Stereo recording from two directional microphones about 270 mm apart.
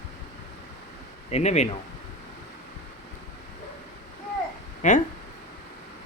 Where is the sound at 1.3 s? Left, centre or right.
Left.